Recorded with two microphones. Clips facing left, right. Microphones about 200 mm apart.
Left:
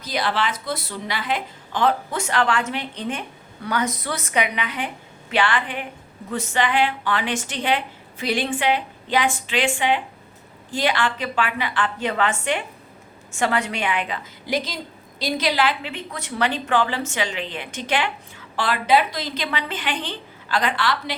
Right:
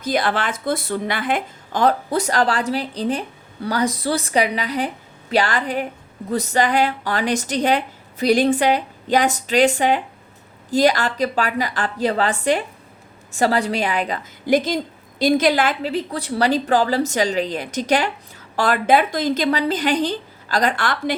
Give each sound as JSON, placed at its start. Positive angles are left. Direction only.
{"t": 0.0, "sound": "a woman's voice", "side_deg": -50}